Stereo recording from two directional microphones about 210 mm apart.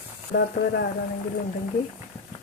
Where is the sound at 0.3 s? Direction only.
40° left (ahead or behind).